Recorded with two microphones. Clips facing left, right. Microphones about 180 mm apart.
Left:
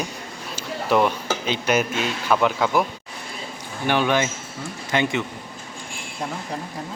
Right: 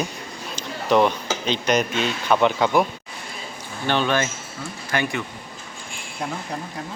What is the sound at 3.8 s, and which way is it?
Speech, 15° left (ahead or behind).